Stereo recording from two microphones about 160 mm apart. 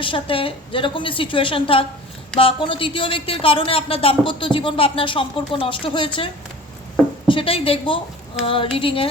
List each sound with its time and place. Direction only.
0.0 s speech: 35° left (ahead or behind)
7.3 s speech: 35° left (ahead or behind)